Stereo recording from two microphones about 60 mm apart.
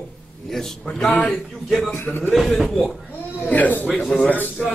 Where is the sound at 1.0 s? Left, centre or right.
Left.